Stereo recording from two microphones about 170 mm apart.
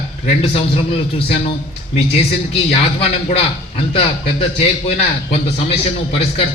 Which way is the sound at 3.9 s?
35° left (ahead or behind).